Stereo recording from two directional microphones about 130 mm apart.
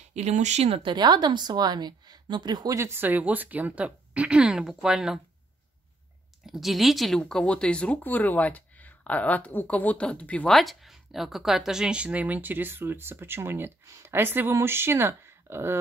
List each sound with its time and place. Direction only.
0.1 s speech: 60° right (ahead or behind); by 5.2 s 5° right (ahead or behind)
6.4 s speech: centre (ahead or behind); by 15.8 s 20° right (ahead or behind)